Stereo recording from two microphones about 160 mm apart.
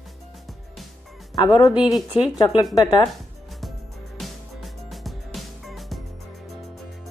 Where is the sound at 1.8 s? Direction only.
5° right (ahead or behind).